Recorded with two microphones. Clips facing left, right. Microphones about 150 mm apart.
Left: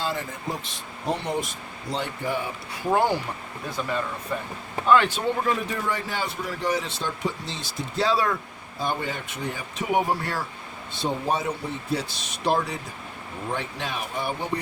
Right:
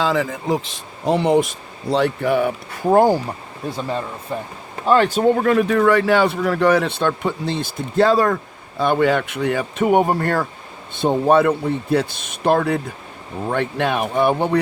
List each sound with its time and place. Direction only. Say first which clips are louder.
0.0 s speech: right 10 dB; 90° right; by 2.5 s 70° right (ahead or behind)
2.9 s speech: right 8 dB; 45° right (ahead or behind)
3.7 s speech: right 4 dB; 30° right (ahead or behind)
4.9 s speech: right 5 dB; 40° right (ahead or behind)
5.4 s speech: right 11 dB; 65° right (ahead or behind); by 8.4 s 50° right (ahead or behind)
8.8 s speech: right 12 dB; 75° right (ahead or behind)